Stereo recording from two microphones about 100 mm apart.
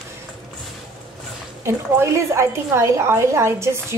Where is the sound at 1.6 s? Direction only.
30° right (ahead or behind).